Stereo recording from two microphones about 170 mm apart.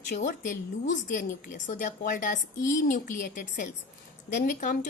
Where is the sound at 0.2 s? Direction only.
50° left (ahead or behind).